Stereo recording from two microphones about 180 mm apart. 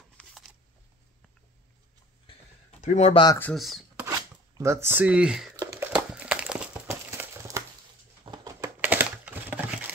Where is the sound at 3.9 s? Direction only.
15° right (ahead or behind).